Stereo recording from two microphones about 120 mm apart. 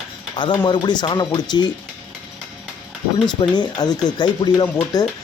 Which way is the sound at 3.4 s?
35° left (ahead or behind).